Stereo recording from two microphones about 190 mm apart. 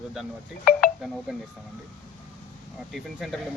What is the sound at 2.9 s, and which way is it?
Speech, centre (ahead or behind).